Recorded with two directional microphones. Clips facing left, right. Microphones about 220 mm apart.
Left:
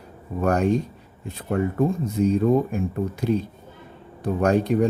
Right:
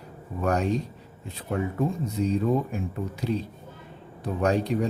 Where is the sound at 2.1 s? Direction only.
50° left (ahead or behind).